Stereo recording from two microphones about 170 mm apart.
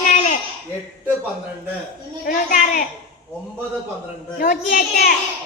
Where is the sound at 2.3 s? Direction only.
50° left (ahead or behind).